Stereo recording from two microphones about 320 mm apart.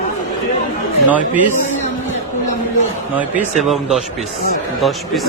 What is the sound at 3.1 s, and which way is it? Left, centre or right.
A man's voice, centre.